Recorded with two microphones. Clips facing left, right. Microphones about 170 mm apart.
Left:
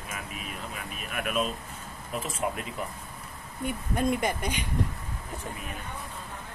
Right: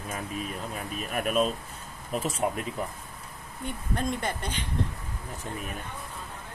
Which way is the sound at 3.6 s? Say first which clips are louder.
Left 3 dB; 10° left (ahead or behind).